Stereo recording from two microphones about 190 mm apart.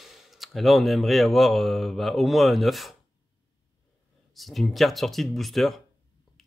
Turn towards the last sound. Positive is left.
turn(degrees=0)  # may be behind; listen again after turning